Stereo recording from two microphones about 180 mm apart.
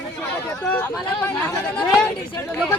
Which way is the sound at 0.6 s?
10° left (ahead or behind).